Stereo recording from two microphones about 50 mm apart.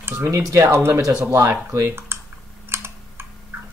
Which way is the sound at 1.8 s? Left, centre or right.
Right.